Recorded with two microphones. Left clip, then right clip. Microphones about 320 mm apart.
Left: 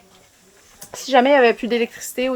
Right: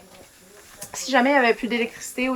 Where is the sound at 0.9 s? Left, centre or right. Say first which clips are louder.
Left 5 dB; left.